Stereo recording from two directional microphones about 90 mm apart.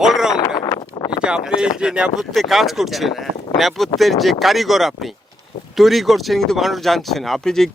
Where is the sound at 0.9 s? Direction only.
50° left (ahead or behind).